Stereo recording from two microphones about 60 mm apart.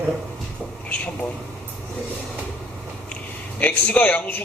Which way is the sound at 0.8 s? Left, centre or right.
Left.